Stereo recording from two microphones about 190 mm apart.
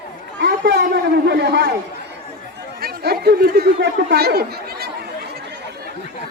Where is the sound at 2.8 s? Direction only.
55° right (ahead or behind).